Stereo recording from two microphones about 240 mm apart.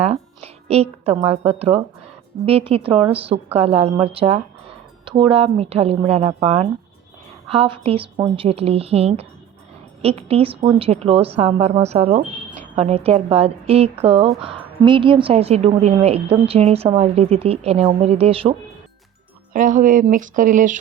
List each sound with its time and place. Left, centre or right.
0.0 s a woman's voice: right
19.5 s speech: right